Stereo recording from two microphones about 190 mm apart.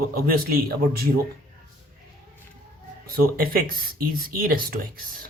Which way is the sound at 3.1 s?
50° right (ahead or behind).